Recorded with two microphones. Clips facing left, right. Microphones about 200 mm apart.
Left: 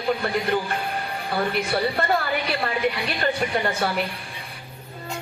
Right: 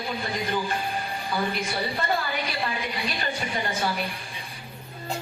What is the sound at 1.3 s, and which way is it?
Speech, 60° left (ahead or behind).